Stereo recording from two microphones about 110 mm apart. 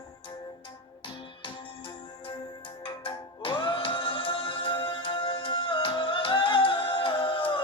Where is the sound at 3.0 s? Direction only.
50° left (ahead or behind).